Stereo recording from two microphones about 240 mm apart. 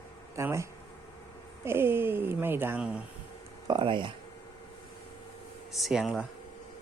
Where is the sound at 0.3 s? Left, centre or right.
Centre.